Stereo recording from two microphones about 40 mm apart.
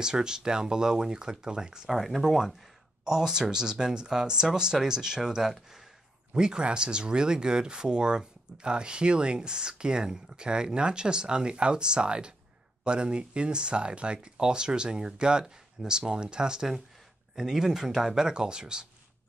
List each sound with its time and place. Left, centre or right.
0.0 s speech: centre
1.9 s speech: centre
18.3 s speech: right